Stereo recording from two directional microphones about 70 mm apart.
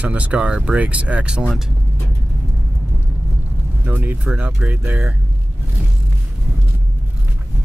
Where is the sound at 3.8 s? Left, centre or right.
Right.